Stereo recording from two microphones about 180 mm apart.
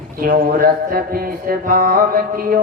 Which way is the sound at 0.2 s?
55° right (ahead or behind).